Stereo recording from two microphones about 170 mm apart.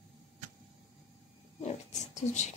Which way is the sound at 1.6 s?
40° left (ahead or behind).